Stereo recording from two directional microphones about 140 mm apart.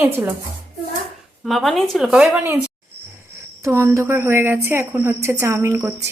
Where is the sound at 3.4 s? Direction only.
20° right (ahead or behind).